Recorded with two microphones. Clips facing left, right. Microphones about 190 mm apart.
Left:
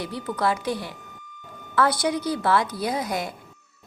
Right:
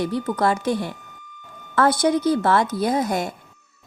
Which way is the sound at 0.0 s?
50° right (ahead or behind).